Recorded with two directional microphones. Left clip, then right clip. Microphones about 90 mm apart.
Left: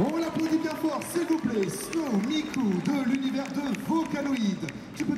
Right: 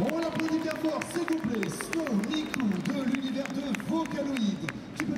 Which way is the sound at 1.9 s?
40° right (ahead or behind).